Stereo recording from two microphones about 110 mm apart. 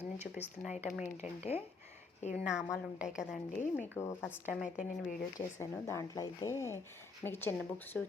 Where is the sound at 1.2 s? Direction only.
75° left (ahead or behind).